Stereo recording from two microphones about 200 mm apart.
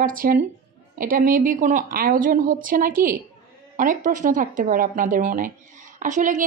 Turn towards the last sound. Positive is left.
turn(degrees=-40)  # may be behind; listen again after turning